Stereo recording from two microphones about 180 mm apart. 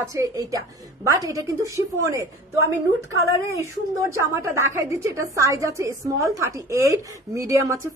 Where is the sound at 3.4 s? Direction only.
15° right (ahead or behind).